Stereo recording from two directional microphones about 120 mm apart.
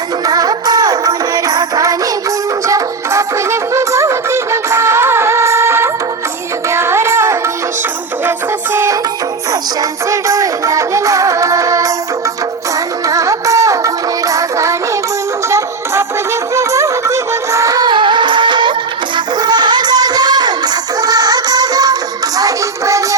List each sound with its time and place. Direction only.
0.3 s music: 30° right (ahead or behind)
8.7 s music: 20° right (ahead or behind)
10.1 s music: 25° right (ahead or behind)
13.1 s music: 25° right (ahead or behind)